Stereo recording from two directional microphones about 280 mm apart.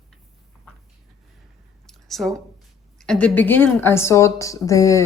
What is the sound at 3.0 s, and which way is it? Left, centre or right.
A woman's voice, centre.